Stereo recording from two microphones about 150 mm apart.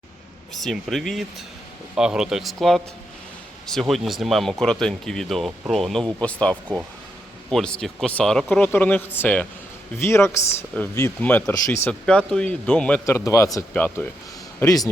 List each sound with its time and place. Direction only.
0.5 s speech: centre (ahead or behind); by 11.9 s 20° left (ahead or behind)
11.9 s speech: 5° left (ahead or behind)
13.1 s speech: 20° left (ahead or behind)
14.6 s speech: 25° left (ahead or behind)